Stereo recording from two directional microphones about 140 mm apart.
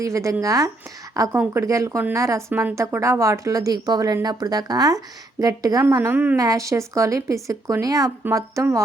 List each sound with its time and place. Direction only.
0.0 s a woman's voice: 20° right (ahead or behind)